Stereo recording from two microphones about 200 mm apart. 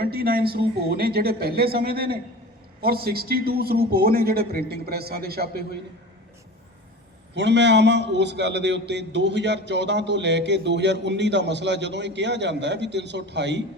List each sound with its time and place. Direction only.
0.0 s a man's voice: 50° right (ahead or behind)
7.3 s a man's voice: 60° right (ahead or behind)